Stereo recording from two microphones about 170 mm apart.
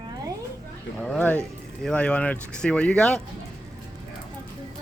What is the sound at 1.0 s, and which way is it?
Speech, 5° left (ahead or behind).